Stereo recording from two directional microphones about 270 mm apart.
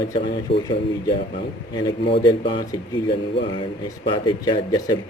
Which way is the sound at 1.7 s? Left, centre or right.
Centre.